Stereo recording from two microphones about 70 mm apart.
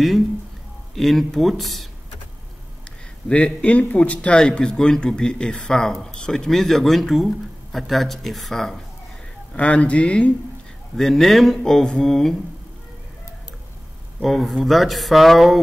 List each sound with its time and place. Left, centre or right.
0.9 s speech: centre
3.3 s a man's voice: centre
9.6 s a man's voice: centre
11.0 s speech: centre
14.2 s speech: centre